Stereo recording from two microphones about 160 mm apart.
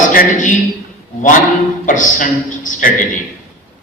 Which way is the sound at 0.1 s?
55° left (ahead or behind).